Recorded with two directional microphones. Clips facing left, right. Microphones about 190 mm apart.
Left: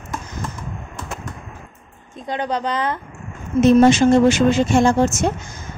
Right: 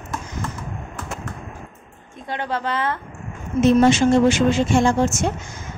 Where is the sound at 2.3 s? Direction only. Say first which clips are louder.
Left 2 dB; 20° left (ahead or behind).